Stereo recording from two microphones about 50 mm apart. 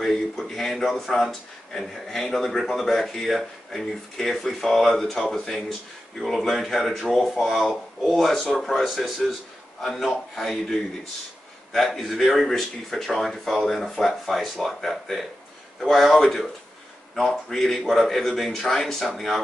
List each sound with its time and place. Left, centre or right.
0.0 s speech: centre